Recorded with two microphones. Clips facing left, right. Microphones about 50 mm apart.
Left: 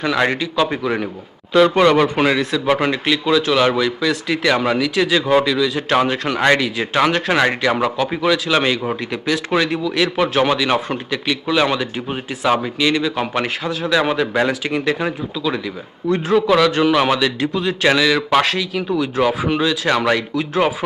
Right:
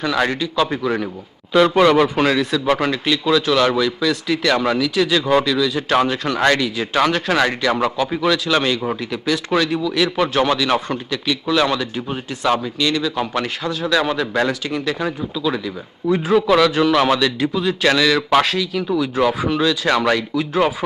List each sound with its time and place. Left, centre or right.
0.0 s speech: centre
0.4 s a man's voice: centre; by 15.1 s left
15.4 s a man's voice: centre
18.3 s a man's voice: centre